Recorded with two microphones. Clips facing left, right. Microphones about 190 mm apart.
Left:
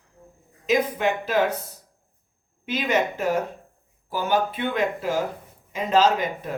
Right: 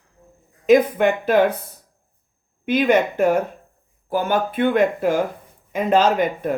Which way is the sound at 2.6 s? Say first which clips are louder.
Right 7 dB; 55° right (ahead or behind).